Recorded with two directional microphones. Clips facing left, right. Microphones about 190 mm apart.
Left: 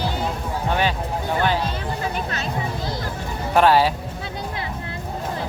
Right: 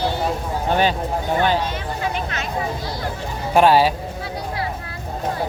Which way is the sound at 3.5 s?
15° right (ahead or behind).